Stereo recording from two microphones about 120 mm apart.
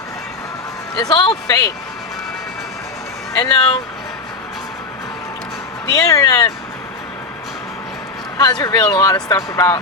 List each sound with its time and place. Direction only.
0.9 s speech: 35° left (ahead or behind)
3.3 s speech: 30° left (ahead or behind)
5.8 s speech: 30° left (ahead or behind)
8.4 s speech: 35° left (ahead or behind)